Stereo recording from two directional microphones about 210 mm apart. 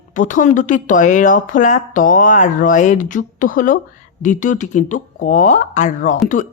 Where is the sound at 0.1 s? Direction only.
40° left (ahead or behind).